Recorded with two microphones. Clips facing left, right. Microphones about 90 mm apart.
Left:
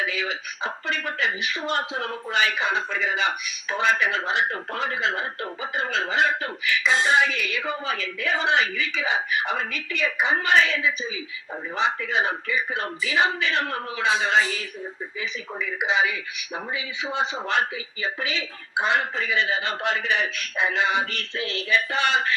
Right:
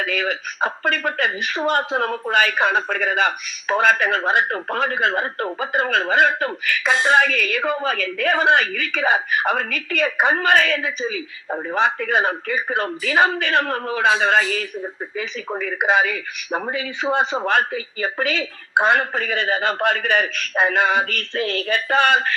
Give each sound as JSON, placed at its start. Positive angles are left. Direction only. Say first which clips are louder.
{"t": 0.0, "sound": "speech", "louder": "right 5 dB", "side_deg": -55}